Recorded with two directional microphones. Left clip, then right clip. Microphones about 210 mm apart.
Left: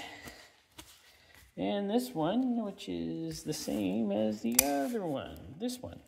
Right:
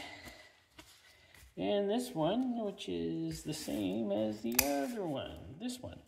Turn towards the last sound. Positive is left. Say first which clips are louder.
# left 5 dB
turn(degrees=40)  # may be behind; listen again after turning